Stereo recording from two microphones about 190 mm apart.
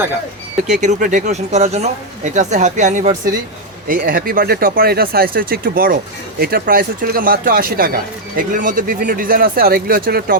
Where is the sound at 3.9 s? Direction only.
50° right (ahead or behind).